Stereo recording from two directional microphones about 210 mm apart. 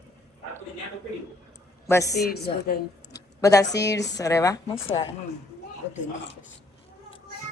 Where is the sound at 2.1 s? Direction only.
50° left (ahead or behind).